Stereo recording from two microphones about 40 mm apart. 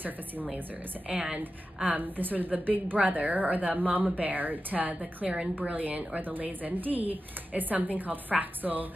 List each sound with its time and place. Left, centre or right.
1.8 s a woman's voice: right